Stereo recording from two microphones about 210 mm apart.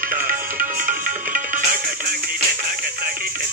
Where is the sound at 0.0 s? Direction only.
40° right (ahead or behind).